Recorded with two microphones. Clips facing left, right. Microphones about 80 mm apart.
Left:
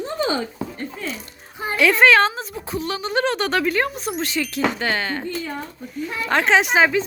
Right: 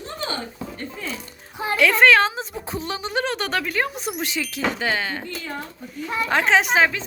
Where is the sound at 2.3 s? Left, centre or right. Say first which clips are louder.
Left 1 dB; right.